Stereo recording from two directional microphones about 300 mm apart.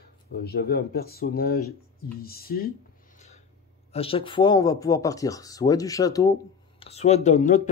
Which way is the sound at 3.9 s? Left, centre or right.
Centre.